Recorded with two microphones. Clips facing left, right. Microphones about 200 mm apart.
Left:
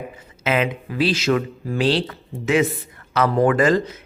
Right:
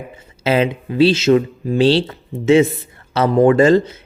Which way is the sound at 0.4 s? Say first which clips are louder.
Right 5 dB; 30° right (ahead or behind).